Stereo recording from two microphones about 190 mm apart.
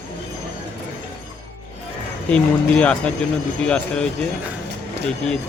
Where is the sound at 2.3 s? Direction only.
5° left (ahead or behind).